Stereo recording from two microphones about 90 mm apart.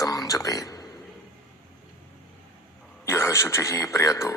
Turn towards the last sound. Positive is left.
turn(degrees=35)  # may be behind; listen again after turning